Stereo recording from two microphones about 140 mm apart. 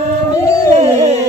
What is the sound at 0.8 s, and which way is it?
Music, 50° right (ahead or behind).